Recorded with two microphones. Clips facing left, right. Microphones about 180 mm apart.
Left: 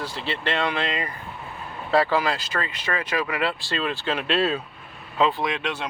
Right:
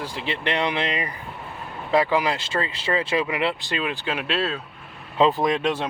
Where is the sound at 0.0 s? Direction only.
15° right (ahead or behind); by 4.6 s centre (ahead or behind).